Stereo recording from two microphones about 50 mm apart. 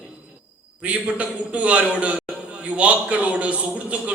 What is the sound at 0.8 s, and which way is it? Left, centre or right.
A man's voice, right.